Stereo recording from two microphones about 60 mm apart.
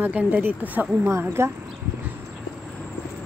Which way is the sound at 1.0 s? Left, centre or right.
Right.